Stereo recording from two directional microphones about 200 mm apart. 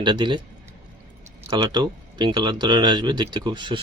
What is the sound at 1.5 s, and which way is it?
Speech, 25° right (ahead or behind).